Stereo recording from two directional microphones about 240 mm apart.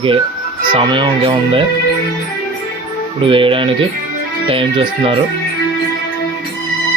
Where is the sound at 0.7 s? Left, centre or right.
Right.